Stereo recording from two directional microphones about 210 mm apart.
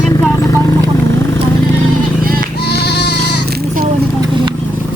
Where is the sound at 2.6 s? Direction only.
50° left (ahead or behind).